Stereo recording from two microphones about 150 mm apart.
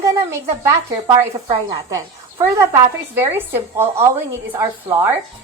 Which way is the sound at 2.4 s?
20° right (ahead or behind).